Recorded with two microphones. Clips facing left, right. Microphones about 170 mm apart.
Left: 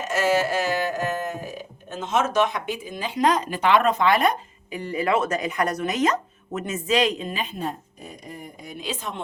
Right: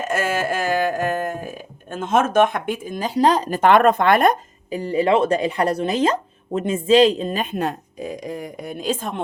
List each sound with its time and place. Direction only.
0.1 s speech: 50° right (ahead or behind)
4.7 s speech: 30° right (ahead or behind)
7.4 s a woman's voice: 70° right (ahead or behind); by 9.2 s 50° right (ahead or behind)